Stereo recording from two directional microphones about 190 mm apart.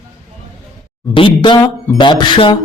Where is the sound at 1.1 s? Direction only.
25° left (ahead or behind).